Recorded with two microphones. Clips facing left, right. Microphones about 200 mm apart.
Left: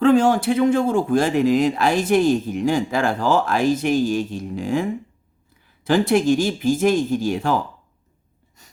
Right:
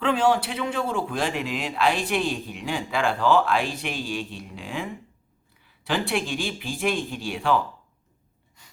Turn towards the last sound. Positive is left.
turn(degrees=40)  # may be behind; listen again after turning